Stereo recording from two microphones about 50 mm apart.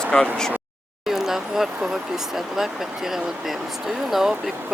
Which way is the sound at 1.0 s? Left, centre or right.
Centre.